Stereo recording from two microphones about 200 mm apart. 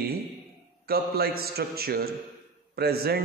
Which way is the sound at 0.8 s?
50° right (ahead or behind).